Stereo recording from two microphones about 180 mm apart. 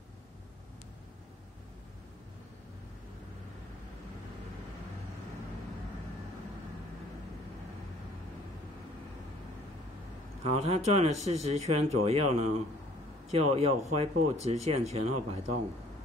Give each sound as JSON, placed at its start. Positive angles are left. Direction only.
{"t": 10.4, "sound": "speech", "side_deg": -35}